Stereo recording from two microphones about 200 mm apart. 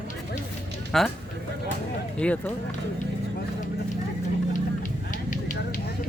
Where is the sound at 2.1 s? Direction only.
5° left (ahead or behind).